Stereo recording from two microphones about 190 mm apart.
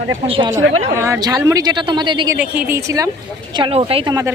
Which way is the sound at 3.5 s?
30° right (ahead or behind).